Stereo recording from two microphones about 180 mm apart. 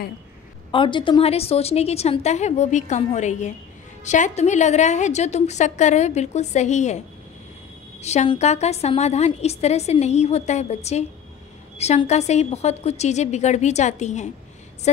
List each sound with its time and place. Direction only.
0.7 s a woman's voice: 25° left (ahead or behind)
8.0 s a woman's voice: 35° left (ahead or behind)